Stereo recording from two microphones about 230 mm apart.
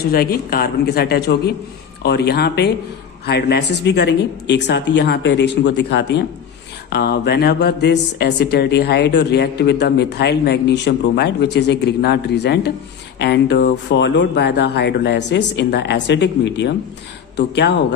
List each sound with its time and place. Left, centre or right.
0.0 s speech: left